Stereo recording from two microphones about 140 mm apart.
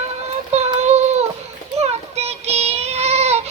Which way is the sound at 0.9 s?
50° right (ahead or behind).